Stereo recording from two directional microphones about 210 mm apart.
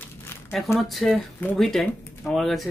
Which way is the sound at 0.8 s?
Centre (ahead or behind).